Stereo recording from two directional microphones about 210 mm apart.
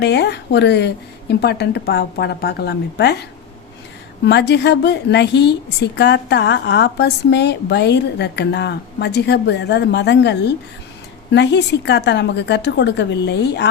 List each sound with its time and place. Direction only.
0.0 s a woman's voice: 55° left (ahead or behind)
4.3 s a woman's voice: 55° left (ahead or behind)